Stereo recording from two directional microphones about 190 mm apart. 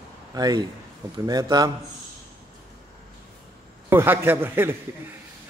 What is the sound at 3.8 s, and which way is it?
Speech, 10° right (ahead or behind).